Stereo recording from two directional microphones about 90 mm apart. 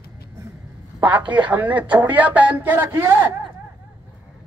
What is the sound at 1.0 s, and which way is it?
A woman's voice, 15° right (ahead or behind).